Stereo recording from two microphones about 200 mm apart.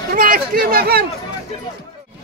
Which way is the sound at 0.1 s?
45° right (ahead or behind).